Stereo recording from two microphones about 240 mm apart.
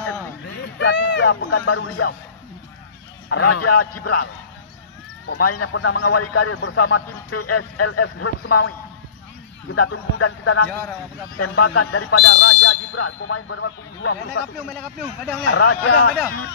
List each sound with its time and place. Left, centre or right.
0.5 s a sound: left
1.5 s a man's voice: left
3.3 s a man's voice: left
3.6 s a man's voice: left
5.4 s a man's voice: left
12.3 s speech: left
14.8 s speech: centre
15.4 s speech: left